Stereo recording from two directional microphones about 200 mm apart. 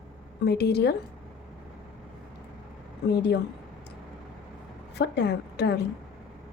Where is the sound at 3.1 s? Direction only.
55° left (ahead or behind).